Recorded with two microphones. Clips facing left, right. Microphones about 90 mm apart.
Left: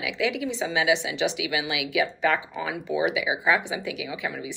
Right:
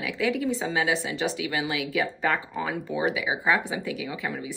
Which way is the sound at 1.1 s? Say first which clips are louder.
Left 2 dB; 90° left.